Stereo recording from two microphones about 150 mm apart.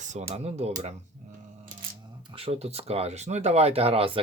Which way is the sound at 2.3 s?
40° right (ahead or behind).